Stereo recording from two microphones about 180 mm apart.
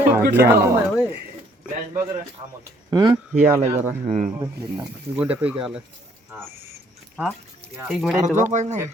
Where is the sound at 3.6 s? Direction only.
40° right (ahead or behind).